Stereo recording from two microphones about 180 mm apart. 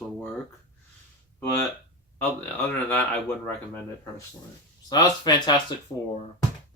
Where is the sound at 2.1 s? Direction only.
10° left (ahead or behind).